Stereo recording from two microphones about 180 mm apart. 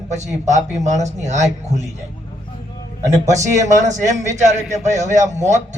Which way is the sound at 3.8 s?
40° right (ahead or behind).